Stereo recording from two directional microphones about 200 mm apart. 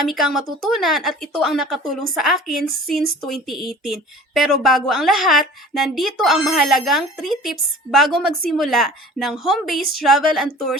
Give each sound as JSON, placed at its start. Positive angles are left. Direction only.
{"t": 0.0, "sound": "a woman's voice", "side_deg": 0}